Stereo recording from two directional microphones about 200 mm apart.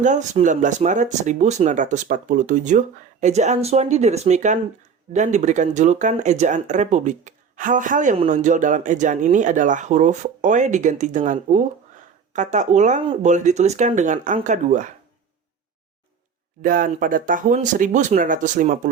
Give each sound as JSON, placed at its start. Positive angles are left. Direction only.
{"t": 0.0, "sound": "speech", "side_deg": -35}
{"t": 16.6, "sound": "speech", "side_deg": -40}